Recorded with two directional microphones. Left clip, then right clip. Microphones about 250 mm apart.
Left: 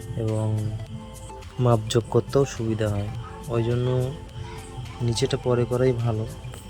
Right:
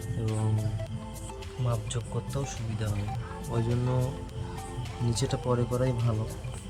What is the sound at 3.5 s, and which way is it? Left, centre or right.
Speech, centre.